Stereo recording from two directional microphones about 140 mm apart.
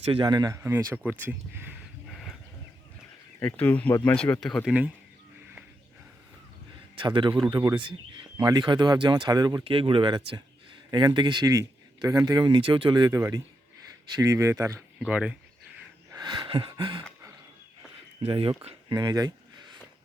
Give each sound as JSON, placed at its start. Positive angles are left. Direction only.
{"t": 0.0, "sound": "speech", "side_deg": -45}
{"t": 0.3, "sound": "speech", "side_deg": -25}
{"t": 2.0, "sound": "a sound", "side_deg": 0}
{"t": 3.4, "sound": "speech", "side_deg": 10}
{"t": 6.9, "sound": "speech", "side_deg": -35}
{"t": 14.9, "sound": "speech", "side_deg": -5}
{"t": 16.1, "sound": "a sound", "side_deg": -30}
{"t": 18.2, "sound": "speech", "side_deg": -40}